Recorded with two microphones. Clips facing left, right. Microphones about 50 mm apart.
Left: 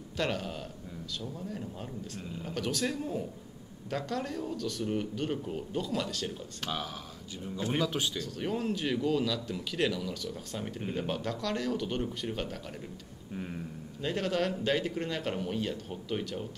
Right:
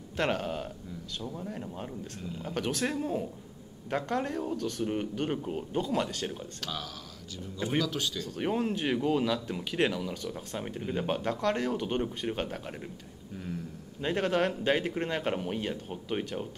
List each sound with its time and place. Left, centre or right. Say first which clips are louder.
0.2 s speech: right 3 dB; right
6.6 s speech: left 5 dB; left
8.4 s speech: right 3 dB; right
14.0 s speech: right 3 dB; right